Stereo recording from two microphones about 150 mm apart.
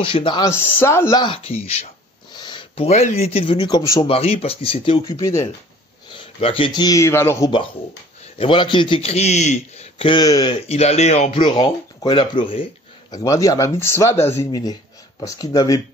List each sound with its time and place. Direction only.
0.0 s a man's voice: 35° left (ahead or behind)
0.5 s speech: 15° left (ahead or behind)
1.2 s speech: 40° left (ahead or behind)
2.3 s speech: 30° left (ahead or behind)
3.5 s a man's voice: 30° left (ahead or behind)
5.0 s speech: 20° left (ahead or behind)
6.1 s speech: 35° left (ahead or behind); by 7.5 s 20° left (ahead or behind)
8.4 s a man's voice: 35° left (ahead or behind)
10.5 s speech: 45° left (ahead or behind)
11.3 s a man's voice: 35° left (ahead or behind)
13.1 s speech: 25° left (ahead or behind)